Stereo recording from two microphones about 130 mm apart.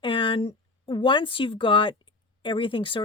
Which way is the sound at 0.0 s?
40° left (ahead or behind).